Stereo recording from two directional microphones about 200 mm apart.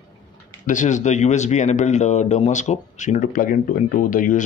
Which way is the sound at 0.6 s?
40° left (ahead or behind).